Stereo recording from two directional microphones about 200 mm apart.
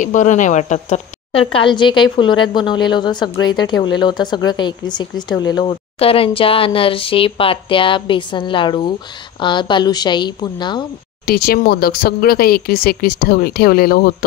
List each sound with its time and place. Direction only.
0.0 s speech: 40° left (ahead or behind); by 10.9 s 20° left (ahead or behind)
11.2 s speech: 50° left (ahead or behind)